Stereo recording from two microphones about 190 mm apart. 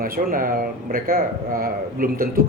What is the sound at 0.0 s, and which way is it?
A man's voice, 50° right (ahead or behind).